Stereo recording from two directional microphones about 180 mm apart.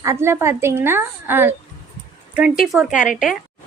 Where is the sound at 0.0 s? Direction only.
15° right (ahead or behind).